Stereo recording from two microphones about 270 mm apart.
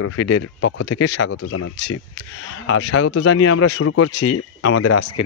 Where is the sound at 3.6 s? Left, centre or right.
Left.